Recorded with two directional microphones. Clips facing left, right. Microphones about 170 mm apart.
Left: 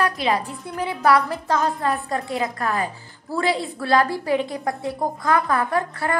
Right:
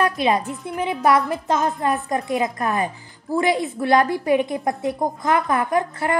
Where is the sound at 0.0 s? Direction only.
20° right (ahead or behind).